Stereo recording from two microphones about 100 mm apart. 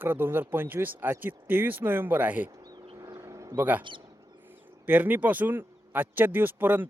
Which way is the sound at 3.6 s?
15° right (ahead or behind).